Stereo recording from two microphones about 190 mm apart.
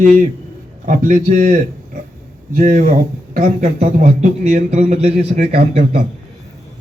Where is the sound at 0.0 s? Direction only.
40° right (ahead or behind).